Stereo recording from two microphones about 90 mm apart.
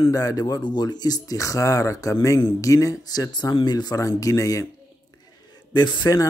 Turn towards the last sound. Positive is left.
turn(degrees=55)  # may be behind; listen again after turning